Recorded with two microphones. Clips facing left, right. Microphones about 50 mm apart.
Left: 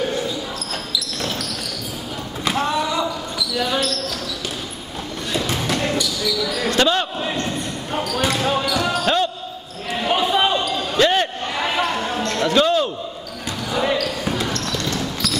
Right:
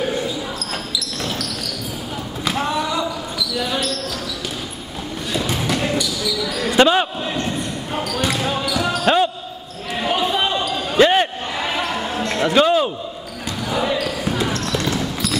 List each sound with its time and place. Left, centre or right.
0.9 s basketball bounce: centre
2.4 s basketball bounce: centre
5.3 s basketball bounce: centre
6.8 s speech: centre
7.3 s basketball bounce: centre
9.0 s basketball bounce: centre
9.8 s basketball bounce: centre
11.0 s basketball bounce: centre
11.6 s basketball bounce: centre
14.0 s basketball bounce: centre